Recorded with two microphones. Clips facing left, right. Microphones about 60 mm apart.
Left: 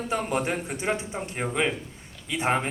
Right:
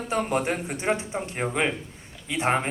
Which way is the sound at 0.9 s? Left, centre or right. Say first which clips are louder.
Right 2 dB; right.